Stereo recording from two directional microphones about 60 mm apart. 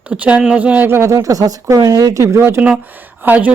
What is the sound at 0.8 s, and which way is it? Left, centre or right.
Speech, right.